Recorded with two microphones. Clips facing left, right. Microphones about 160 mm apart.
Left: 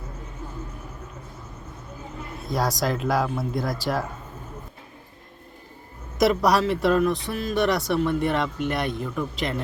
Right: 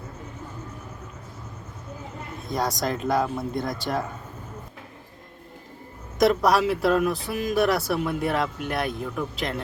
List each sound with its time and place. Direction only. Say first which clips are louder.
2.5 s speech: left 1 dB; centre (ahead or behind)
6.1 s speech: even; centre (ahead or behind)